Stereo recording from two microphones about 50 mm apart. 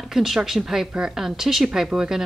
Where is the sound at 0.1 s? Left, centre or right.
Centre.